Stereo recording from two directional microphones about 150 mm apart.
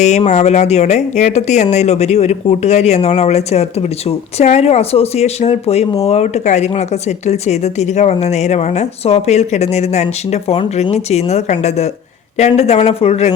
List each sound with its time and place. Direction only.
0.0 s speech: 50° left (ahead or behind)